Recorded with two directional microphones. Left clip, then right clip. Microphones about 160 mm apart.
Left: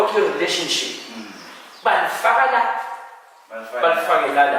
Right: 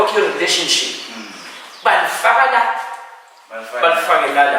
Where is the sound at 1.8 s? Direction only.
15° left (ahead or behind).